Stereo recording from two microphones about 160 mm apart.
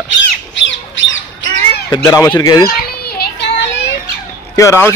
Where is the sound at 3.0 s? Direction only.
80° left.